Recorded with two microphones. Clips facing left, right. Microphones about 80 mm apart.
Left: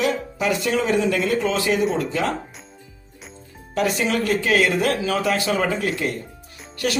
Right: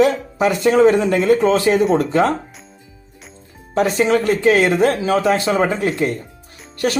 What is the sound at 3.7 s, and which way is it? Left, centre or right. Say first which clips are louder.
Speech: right 6 dB; right.